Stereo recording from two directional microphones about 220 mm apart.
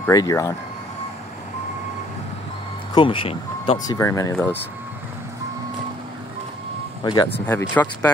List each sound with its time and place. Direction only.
0.0 s speech: 15° left (ahead or behind)
2.9 s speech: 25° left (ahead or behind)
7.1 s speech: 20° left (ahead or behind)
7.3 s speech: 10° left (ahead or behind)